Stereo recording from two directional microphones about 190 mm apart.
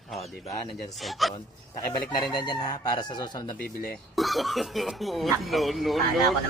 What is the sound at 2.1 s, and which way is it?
Speech, 20° left (ahead or behind).